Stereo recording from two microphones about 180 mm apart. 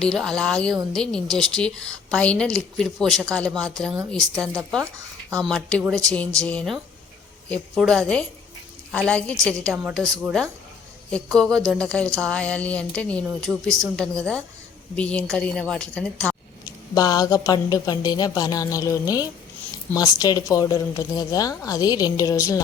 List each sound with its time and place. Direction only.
0.0 s a woman's voice: 5° left (ahead or behind)
11.1 s a woman's voice: 5° left (ahead or behind)
16.9 s a woman's voice: 20° left (ahead or behind)